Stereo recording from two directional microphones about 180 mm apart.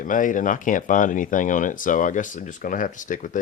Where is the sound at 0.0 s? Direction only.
45° left (ahead or behind).